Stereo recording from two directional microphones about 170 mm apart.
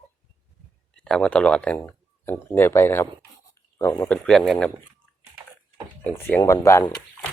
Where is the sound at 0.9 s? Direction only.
5° left (ahead or behind).